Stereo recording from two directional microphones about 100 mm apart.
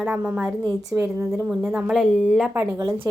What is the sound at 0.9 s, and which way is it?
Speech, 25° right (ahead or behind).